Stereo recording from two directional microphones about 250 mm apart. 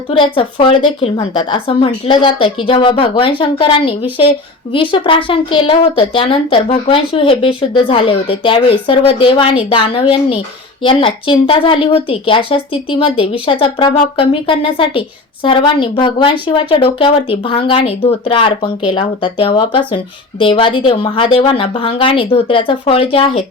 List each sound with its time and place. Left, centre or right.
0.1 s speech: left